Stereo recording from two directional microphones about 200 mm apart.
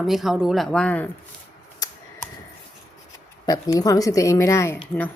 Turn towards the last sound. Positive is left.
turn(degrees=10)  # may be behind; listen again after turning